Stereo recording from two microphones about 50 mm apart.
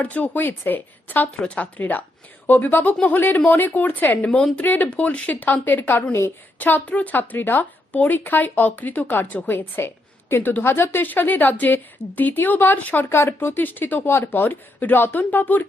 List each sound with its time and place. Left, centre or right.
0.0 s speech: left
1.4 s speech: left
1.8 s speech: left
11.0 s speech: left
13.1 s speech: left
13.6 s speech: left